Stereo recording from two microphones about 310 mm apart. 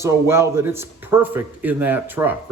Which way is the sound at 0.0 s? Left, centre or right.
Centre.